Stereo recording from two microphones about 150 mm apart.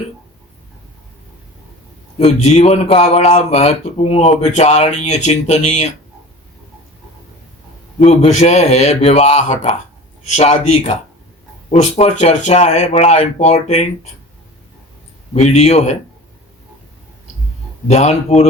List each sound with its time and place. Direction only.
2.1 s speech: 45° left (ahead or behind)
7.9 s speech: 45° left (ahead or behind)
15.4 s speech: 45° left (ahead or behind)
17.8 s speech: 45° left (ahead or behind)